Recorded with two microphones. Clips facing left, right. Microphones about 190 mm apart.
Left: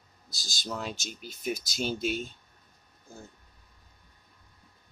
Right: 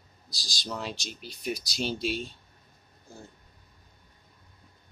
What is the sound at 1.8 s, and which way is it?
Speech, 50° left (ahead or behind).